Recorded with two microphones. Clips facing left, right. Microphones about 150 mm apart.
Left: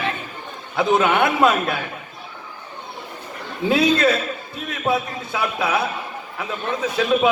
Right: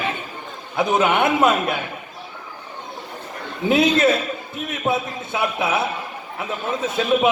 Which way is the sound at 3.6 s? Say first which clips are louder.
Right 1 dB; 20° right (ahead or behind).